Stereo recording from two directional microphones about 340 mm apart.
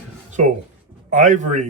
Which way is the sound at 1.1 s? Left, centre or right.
Right.